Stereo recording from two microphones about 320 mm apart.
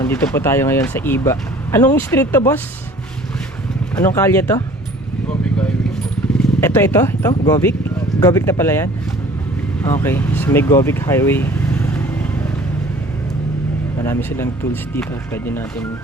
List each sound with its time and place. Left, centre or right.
0.0 s speech: centre
3.9 s speech: centre
6.6 s speech: centre
9.8 s vehicle: centre
14.0 s speech: centre